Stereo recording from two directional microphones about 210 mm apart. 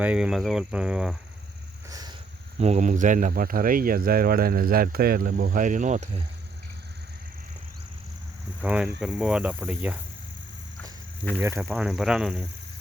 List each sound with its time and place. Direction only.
0.0 s speech: 5° right (ahead or behind)
1.9 s a sound: 20° right (ahead or behind)
2.6 s speech: 30° right (ahead or behind)
8.6 s speech: 5° right (ahead or behind)
11.3 s speech: 15° right (ahead or behind)